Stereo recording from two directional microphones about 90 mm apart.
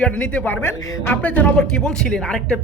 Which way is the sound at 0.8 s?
40° left (ahead or behind).